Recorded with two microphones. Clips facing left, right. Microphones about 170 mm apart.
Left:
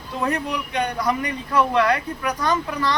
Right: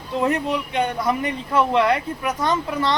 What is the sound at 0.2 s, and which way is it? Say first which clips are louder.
Speech: right 3 dB; 20° right (ahead or behind).